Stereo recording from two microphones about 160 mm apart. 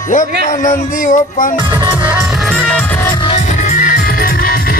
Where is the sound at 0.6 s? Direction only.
55° left (ahead or behind).